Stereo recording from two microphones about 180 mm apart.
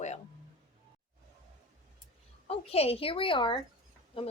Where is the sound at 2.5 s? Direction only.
35° left (ahead or behind).